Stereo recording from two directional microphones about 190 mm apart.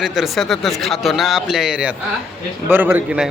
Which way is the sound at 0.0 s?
Centre (ahead or behind).